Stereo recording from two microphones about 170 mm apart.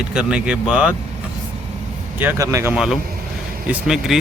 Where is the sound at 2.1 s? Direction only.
15° right (ahead or behind).